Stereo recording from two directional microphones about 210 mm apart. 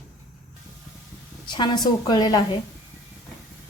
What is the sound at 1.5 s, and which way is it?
Speech, 20° left (ahead or behind).